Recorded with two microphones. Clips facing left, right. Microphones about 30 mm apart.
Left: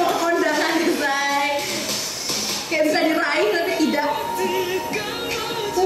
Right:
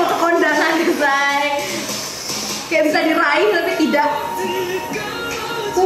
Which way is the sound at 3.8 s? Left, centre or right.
Centre.